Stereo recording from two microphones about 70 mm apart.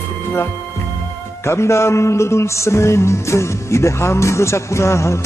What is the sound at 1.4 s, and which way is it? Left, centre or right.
Music, left.